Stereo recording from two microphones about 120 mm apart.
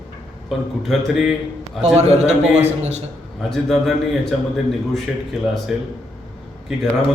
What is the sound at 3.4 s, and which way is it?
Speech, 5° left (ahead or behind).